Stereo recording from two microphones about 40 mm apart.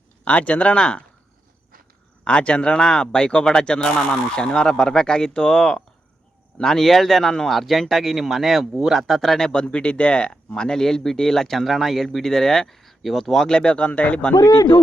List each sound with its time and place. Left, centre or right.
0.3 s speech: left
0.8 s speech: left
2.2 s speech: left
6.6 s speech: centre
9.5 s speech: left
10.5 s speech: centre
11.6 s speech: centre
12.0 s speech: centre
13.5 s speech: left